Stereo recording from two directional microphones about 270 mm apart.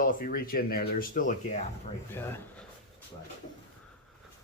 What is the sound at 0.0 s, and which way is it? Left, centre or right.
Speech, left.